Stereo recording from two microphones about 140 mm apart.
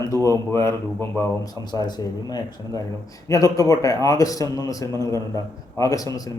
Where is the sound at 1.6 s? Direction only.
30° left (ahead or behind).